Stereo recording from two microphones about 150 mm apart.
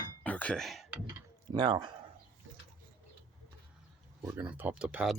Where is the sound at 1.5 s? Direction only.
30° right (ahead or behind).